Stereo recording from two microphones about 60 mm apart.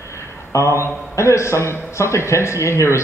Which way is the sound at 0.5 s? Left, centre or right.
Left.